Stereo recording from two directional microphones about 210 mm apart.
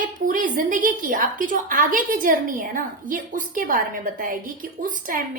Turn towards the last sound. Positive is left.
turn(degrees=-40)  # may be behind; listen again after turning